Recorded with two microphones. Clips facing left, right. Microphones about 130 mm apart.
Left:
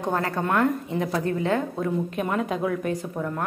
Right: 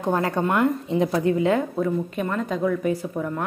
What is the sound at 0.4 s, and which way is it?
Speech, 10° right (ahead or behind).